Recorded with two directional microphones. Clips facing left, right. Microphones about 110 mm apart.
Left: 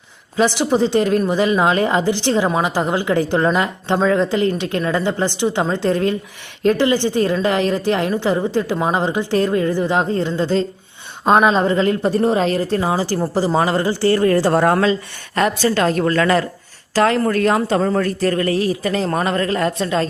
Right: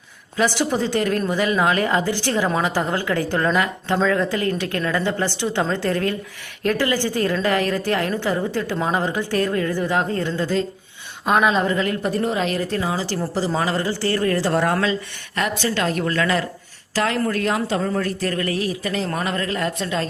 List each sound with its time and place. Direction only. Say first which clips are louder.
0.3 s a man's voice: left 4 dB; 20° left (ahead or behind); by 18.1 s 55° left (ahead or behind)
18.2 s a man's voice: left 6 dB; 35° left (ahead or behind)